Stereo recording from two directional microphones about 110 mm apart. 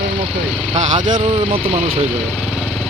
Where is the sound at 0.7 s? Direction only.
80° right.